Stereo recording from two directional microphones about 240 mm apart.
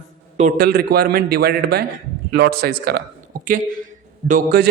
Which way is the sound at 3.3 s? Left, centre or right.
Right.